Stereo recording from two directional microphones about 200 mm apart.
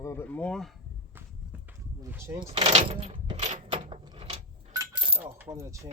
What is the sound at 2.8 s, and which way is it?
Door, 30° right (ahead or behind).